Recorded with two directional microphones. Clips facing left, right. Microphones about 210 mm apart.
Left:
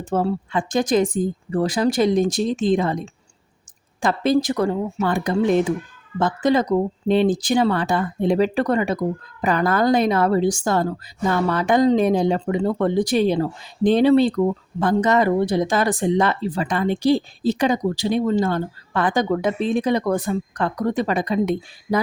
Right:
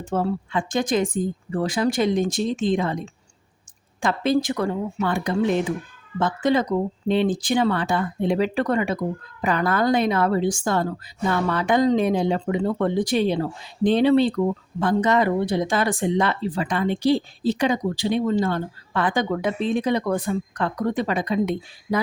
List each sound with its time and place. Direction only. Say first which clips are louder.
0.0 s speech: left 2 dB; 40° left (ahead or behind)
4.0 s speech: left 2 dB; 40° left (ahead or behind)